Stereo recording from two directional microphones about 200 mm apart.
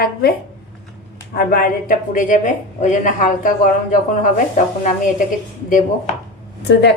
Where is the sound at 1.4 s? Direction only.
45° left (ahead or behind).